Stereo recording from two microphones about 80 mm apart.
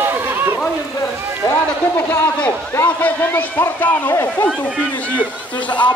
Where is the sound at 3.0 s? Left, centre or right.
Left.